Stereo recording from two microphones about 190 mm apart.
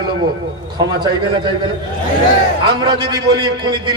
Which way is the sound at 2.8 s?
20° right (ahead or behind).